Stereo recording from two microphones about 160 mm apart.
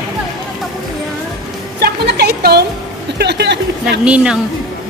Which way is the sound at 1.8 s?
90° right.